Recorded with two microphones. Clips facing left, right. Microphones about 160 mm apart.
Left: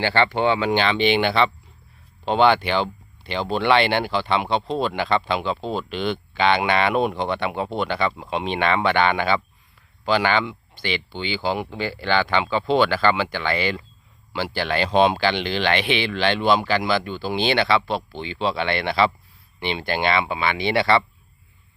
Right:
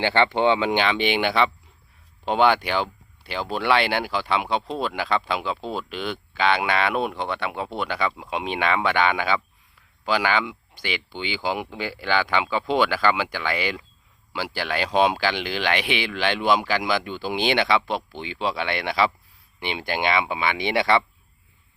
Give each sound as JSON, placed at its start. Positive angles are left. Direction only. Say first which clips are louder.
{"t": 0.0, "sound": "speech", "louder": "even", "side_deg": -20}